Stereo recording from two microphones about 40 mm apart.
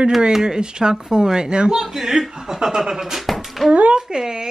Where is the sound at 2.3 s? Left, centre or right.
Centre.